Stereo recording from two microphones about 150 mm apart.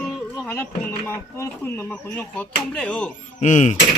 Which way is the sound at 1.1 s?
15° left (ahead or behind).